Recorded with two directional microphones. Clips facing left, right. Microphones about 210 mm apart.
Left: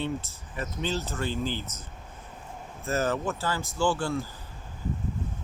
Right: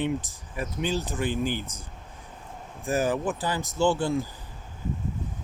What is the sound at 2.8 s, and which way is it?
Speech, 15° right (ahead or behind).